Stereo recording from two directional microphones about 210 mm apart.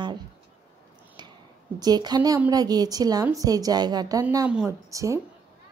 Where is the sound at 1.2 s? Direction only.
20° right (ahead or behind).